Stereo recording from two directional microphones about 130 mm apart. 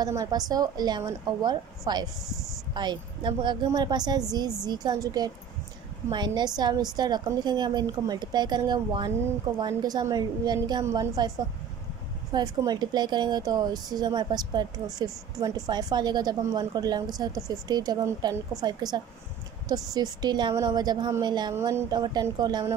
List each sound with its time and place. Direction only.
0.0 s a woman's voice: 30° right (ahead or behind)
21.5 s a woman's voice: 25° right (ahead or behind)